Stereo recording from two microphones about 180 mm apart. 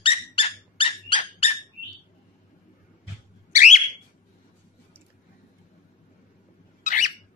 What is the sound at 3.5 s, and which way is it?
Alarm, 40° left (ahead or behind).